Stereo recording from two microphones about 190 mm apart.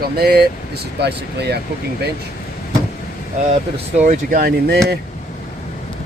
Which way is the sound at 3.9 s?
40° right (ahead or behind).